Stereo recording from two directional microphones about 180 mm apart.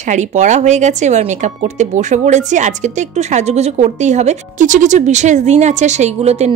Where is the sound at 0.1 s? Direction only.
40° right (ahead or behind).